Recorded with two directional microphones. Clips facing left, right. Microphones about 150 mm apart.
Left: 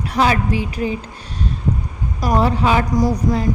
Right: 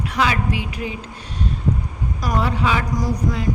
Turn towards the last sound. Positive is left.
turn(degrees=35)  # may be behind; listen again after turning